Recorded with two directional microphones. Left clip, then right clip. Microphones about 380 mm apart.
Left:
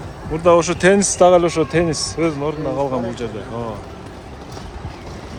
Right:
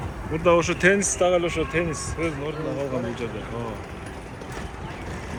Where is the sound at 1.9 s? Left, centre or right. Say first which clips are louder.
Left 8 dB; centre.